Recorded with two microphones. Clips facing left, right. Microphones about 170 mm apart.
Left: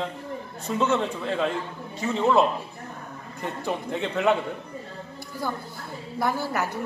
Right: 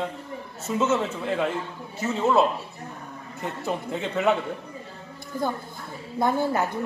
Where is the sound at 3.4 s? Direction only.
Centre (ahead or behind).